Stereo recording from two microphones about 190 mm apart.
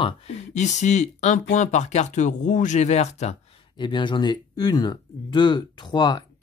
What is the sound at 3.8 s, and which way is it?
Speech, 25° left (ahead or behind).